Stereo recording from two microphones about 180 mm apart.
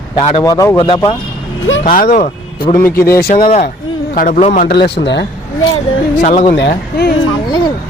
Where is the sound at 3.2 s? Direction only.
55° left (ahead or behind).